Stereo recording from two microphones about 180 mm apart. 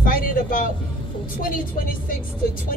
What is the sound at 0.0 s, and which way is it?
Speech, 50° left (ahead or behind).